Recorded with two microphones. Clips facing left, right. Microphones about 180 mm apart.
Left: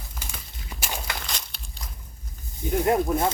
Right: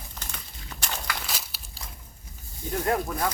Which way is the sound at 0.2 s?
10° left (ahead or behind).